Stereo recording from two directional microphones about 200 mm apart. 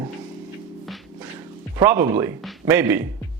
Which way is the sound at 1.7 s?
15° right (ahead or behind).